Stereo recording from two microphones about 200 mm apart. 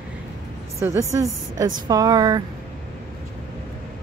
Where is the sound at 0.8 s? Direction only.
15° right (ahead or behind).